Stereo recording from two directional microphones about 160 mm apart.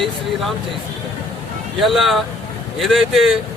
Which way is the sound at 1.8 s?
Centre (ahead or behind).